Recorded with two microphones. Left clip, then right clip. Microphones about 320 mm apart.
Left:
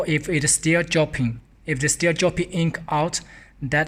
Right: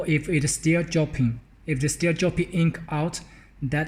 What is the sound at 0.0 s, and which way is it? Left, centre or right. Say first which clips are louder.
Speech: left 3 dB; left.